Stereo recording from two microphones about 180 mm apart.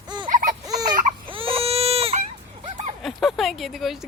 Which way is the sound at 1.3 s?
30° right (ahead or behind).